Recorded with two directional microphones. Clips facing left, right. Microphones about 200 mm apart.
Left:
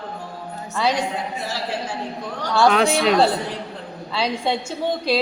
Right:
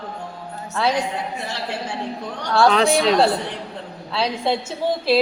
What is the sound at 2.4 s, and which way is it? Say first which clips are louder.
A woman's voice: even; centre (ahead or behind).